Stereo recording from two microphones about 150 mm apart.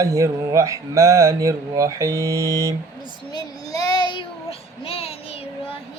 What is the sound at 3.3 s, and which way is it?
Child singing, 25° left (ahead or behind).